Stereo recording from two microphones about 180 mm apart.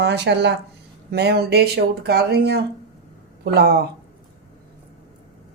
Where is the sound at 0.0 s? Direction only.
70° right (ahead or behind).